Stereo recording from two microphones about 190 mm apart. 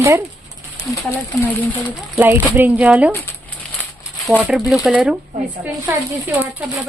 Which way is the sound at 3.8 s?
10° left (ahead or behind).